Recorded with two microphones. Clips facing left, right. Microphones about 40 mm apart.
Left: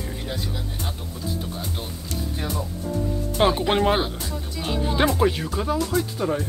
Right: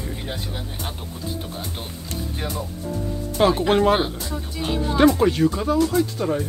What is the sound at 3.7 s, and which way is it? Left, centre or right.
Speech, centre.